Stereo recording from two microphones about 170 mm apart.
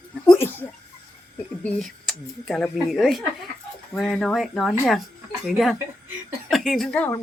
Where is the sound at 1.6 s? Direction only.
Centre (ahead or behind).